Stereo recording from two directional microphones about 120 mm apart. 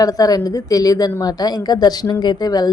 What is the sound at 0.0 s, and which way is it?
A woman's voice, 30° left (ahead or behind).